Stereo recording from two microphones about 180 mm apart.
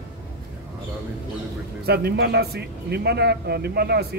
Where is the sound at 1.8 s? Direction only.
60° right (ahead or behind).